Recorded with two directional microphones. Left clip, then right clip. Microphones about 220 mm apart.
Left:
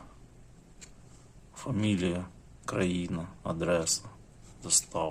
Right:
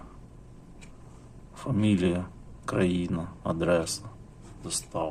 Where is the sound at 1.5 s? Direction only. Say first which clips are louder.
Right 4 dB; 10° left (ahead or behind).